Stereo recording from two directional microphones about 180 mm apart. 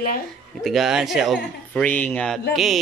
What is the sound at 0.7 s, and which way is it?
Speech, centre (ahead or behind).